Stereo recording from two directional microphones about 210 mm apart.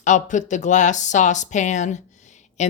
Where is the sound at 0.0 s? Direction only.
35° left (ahead or behind).